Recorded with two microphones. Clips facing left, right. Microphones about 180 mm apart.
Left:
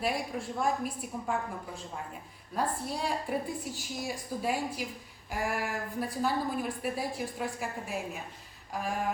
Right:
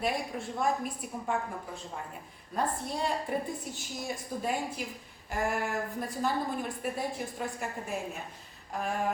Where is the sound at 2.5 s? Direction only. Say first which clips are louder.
Even; 5° left (ahead or behind).